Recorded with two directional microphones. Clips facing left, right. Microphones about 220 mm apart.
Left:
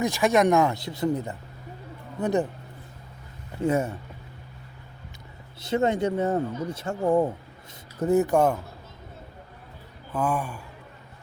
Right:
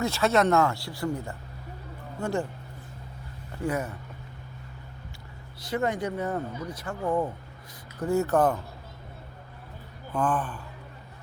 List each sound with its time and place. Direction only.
0.0 s speech: 15° left (ahead or behind)
3.6 s speech: 25° left (ahead or behind)
5.5 s speech: 25° left (ahead or behind)
10.1 s speech: 10° left (ahead or behind)